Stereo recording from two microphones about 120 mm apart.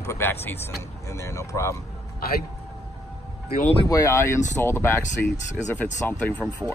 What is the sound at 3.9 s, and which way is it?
A man's voice, 25° left (ahead or behind).